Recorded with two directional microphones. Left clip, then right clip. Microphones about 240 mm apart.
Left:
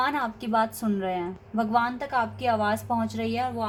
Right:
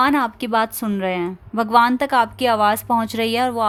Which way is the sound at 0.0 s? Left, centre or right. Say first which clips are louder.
Right 9 dB; right.